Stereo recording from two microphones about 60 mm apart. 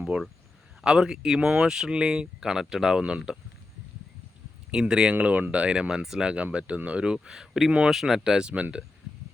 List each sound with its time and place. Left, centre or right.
0.9 s speech: centre
4.7 s speech: centre
5.1 s speech: right